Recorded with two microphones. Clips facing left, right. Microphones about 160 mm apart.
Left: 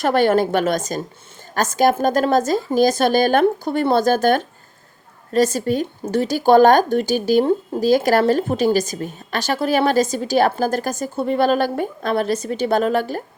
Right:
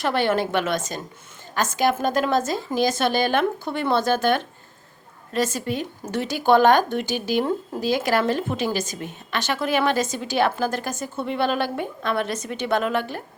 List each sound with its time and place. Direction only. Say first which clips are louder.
0.0 s speech: left 6 dB; 45° left (ahead or behind)